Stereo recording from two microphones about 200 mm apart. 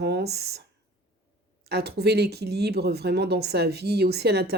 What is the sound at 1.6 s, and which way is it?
Speech, 55° right (ahead or behind).